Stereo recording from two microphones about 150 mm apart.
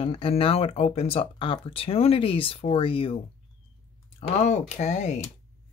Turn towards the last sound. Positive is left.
turn(degrees=50)  # may be behind; listen again after turning